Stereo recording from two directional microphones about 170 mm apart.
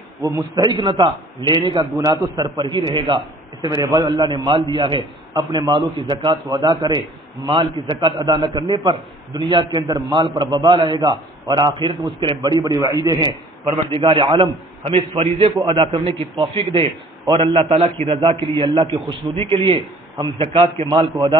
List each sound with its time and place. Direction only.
0.2 s a man's voice: 15° right (ahead or behind)
0.7 s a man's voice: 30° right (ahead or behind)